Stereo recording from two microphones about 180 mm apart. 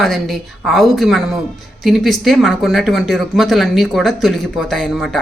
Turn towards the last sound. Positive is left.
turn(degrees=0)  # may be behind; listen again after turning